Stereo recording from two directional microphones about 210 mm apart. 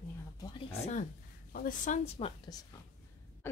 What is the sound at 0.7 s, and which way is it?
Speech, 35° left (ahead or behind).